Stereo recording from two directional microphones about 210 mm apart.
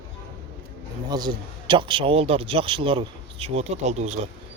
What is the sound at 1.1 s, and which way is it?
A man's voice, 20° right (ahead or behind).